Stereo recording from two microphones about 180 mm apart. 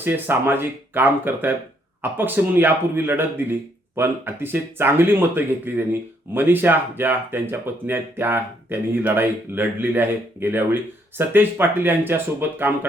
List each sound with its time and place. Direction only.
0.0 s speech: 10° right (ahead or behind)